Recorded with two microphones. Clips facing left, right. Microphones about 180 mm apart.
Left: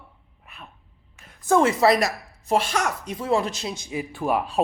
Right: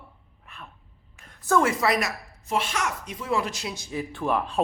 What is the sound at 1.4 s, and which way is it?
Speech, 20° left (ahead or behind).